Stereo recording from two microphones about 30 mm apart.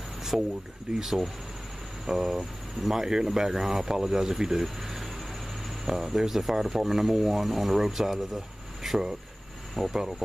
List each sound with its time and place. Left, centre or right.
0.3 s speech: centre